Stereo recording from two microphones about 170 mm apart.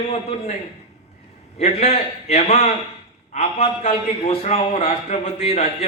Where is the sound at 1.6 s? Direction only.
40° left (ahead or behind).